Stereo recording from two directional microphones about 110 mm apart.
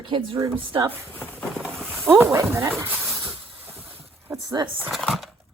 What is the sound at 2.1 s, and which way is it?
Speech, 25° right (ahead or behind).